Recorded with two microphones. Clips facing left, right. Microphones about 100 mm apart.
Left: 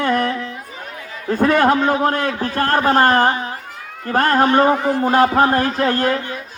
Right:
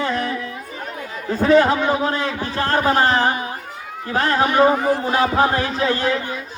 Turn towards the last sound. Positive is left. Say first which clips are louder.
# left 2 dB
turn(degrees=50)  # may be behind; listen again after turning